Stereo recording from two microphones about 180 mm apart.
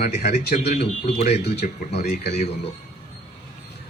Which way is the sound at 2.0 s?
60° left (ahead or behind).